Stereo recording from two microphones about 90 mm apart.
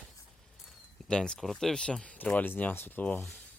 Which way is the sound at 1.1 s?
10° left (ahead or behind).